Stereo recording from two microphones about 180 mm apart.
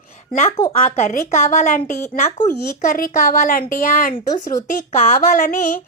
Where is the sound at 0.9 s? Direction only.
45° left (ahead or behind).